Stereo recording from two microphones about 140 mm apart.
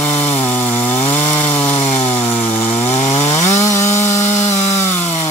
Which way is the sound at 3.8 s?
55° left (ahead or behind).